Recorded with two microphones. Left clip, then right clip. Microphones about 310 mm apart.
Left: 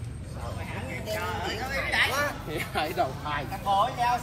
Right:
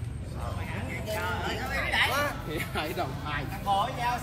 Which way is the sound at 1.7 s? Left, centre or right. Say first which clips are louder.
Left 1 dB; centre.